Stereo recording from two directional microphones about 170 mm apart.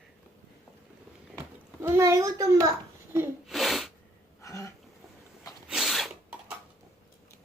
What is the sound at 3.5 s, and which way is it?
Sneeze, centre (ahead or behind).